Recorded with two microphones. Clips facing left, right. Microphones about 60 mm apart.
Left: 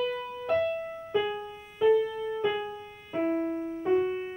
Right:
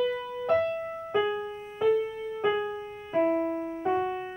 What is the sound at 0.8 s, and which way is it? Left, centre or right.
Music, right.